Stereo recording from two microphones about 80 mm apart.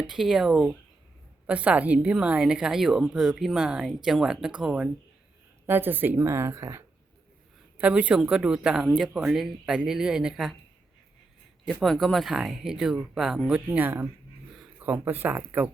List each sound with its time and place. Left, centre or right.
0.1 s speech: centre
5.6 s a woman's voice: right
7.8 s speech: centre
11.6 s speech: centre
13.7 s speech: right